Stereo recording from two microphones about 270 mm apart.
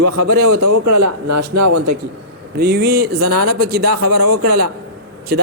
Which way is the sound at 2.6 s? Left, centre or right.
Right.